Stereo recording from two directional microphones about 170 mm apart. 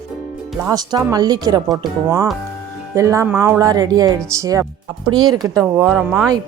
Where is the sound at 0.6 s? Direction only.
25° right (ahead or behind).